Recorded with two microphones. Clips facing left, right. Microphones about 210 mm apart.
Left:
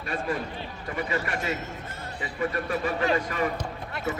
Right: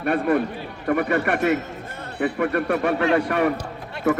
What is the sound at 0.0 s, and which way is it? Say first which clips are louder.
A man's voice: right 10 dB; 60° right (ahead or behind).